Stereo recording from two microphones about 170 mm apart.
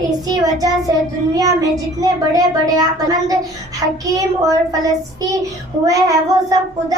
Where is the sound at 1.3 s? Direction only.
20° right (ahead or behind).